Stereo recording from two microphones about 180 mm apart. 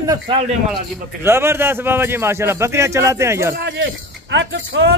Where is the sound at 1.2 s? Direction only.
15° right (ahead or behind).